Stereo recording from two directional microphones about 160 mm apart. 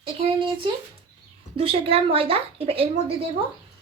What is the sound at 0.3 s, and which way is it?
A woman's voice, 30° right (ahead or behind).